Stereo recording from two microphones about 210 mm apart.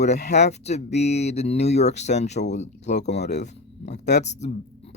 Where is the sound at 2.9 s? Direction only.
55° left (ahead or behind).